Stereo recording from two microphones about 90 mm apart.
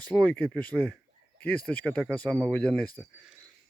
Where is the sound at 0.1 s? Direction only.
20° right (ahead or behind).